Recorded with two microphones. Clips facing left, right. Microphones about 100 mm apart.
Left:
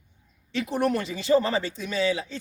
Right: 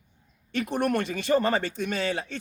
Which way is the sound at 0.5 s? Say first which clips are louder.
Left 1 dB; 55° right (ahead or behind).